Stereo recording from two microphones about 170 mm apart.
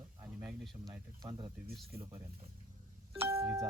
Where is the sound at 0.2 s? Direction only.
15° right (ahead or behind).